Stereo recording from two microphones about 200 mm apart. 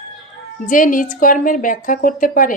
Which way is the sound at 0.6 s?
40° left (ahead or behind).